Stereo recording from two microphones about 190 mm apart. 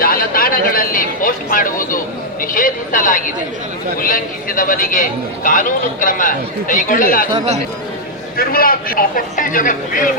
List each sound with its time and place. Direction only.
0.0 s a sound: 50° left (ahead or behind)
2.4 s a man's voice: 45° left (ahead or behind)
8.4 s a man's voice: 50° left (ahead or behind)